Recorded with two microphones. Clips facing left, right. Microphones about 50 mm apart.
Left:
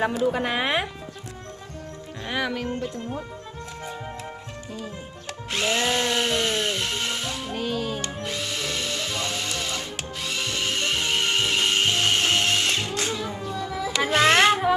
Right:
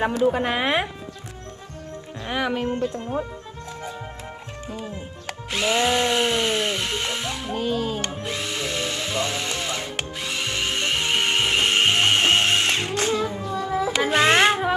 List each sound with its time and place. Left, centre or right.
0.5 s speech: centre
2.2 s speech: centre
2.5 s speech: right
5.5 s music: centre